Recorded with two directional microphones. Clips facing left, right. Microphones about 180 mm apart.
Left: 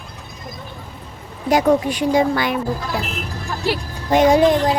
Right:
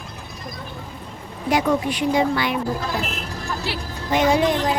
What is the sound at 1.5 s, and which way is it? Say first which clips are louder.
Speech: left 4 dB; 45° left (ahead or behind).